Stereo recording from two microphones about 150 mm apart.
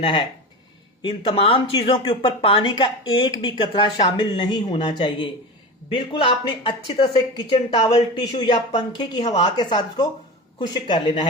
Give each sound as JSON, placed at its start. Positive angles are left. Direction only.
{"t": 0.0, "sound": "speech", "side_deg": 30}